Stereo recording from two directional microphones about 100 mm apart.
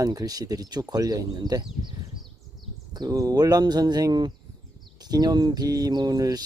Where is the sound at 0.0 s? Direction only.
40° right (ahead or behind).